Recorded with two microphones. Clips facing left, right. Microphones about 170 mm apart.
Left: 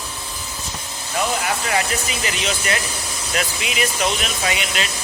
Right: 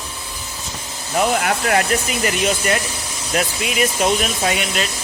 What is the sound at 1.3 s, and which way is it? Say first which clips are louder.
Speech: right 4 dB; 55° right (ahead or behind).